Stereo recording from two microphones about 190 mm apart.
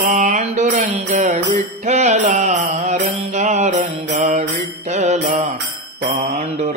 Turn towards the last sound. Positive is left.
turn(degrees=-40)  # may be behind; listen again after turning